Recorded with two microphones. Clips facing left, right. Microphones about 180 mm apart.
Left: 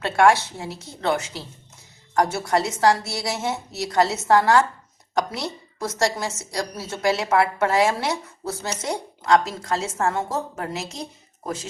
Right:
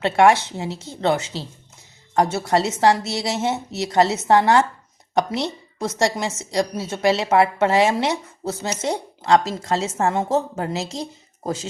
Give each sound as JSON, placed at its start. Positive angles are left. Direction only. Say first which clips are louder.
{"t": 0.0, "sound": "a woman's voice", "louder": "right 2 dB", "side_deg": -20}